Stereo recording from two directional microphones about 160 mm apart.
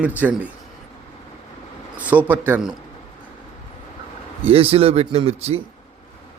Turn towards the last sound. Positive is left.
turn(degrees=-40)  # may be behind; listen again after turning